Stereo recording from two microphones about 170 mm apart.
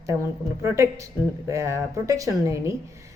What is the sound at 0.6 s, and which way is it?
A woman's voice, 15° right (ahead or behind).